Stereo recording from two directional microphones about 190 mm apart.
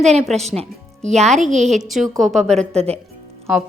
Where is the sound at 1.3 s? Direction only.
40° right (ahead or behind).